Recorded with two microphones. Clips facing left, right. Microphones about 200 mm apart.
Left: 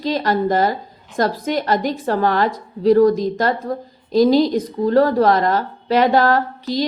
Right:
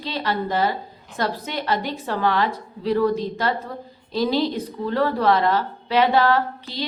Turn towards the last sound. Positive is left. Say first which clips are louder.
# left 5 dB
turn(degrees=45)  # may be behind; listen again after turning